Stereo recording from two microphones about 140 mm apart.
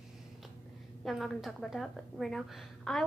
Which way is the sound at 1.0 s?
Centre (ahead or behind).